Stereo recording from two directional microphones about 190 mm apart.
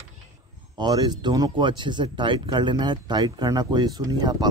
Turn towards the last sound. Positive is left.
turn(degrees=-20)  # may be behind; listen again after turning